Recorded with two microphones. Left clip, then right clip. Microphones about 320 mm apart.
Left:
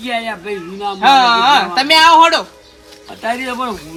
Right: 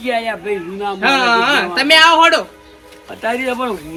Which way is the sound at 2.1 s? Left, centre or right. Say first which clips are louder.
Left 2 dB; left.